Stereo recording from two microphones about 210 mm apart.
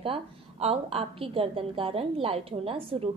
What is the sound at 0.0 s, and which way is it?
A woman's voice, 30° right (ahead or behind).